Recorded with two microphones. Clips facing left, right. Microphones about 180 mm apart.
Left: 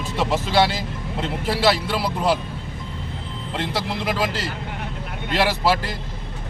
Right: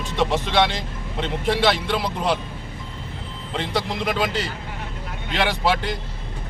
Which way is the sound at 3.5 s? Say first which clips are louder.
Right 1 dB; 5° left (ahead or behind).